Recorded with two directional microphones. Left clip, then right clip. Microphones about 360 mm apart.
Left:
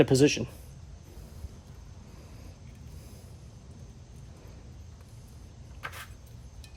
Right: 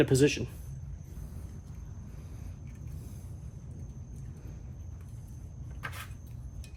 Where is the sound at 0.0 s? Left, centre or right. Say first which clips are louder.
Left 3 dB; left.